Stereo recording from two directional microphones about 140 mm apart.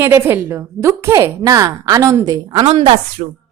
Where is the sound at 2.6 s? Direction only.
45° right (ahead or behind).